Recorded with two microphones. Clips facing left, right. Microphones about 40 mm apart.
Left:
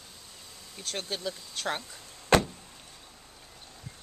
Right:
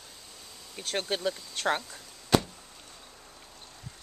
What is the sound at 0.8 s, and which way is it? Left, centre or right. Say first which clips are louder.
Speech: right 4 dB; right.